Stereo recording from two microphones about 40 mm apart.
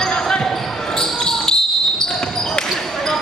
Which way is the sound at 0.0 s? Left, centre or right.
Centre.